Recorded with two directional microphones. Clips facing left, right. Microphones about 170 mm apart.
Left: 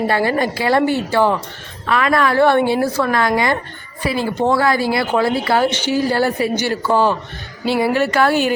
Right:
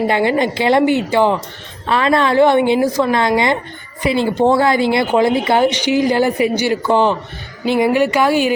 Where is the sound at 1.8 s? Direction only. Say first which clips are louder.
Right 2 dB; 25° right (ahead or behind).